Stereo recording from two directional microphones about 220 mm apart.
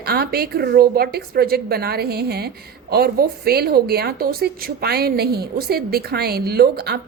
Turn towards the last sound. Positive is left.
turn(degrees=-45)  # may be behind; listen again after turning